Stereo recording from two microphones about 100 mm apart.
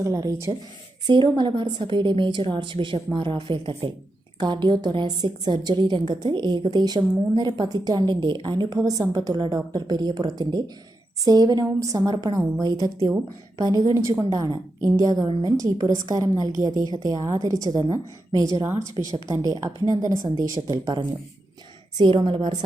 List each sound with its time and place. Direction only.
0.0 s a woman's voice: 35° right (ahead or behind)
1.0 s a woman's voice: 50° right (ahead or behind); by 20.9 s 35° right (ahead or behind)
21.9 s a woman's voice: 55° right (ahead or behind)